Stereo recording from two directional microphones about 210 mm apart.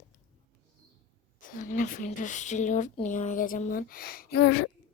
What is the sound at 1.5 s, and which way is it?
Speech, 40° left (ahead or behind).